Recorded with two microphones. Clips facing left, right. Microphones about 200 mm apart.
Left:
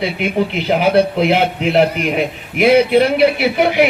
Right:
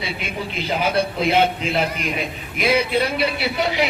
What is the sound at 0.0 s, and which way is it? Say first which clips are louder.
A man's voice: left 11 dB; 65° left (ahead or behind).